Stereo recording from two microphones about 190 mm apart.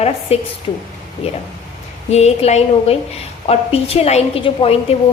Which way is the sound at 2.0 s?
35° left (ahead or behind).